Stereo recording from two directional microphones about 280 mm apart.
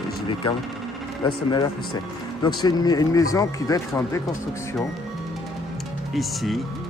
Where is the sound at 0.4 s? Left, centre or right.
Centre.